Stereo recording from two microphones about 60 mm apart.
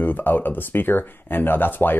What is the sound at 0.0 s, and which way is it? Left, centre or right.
Speech, left.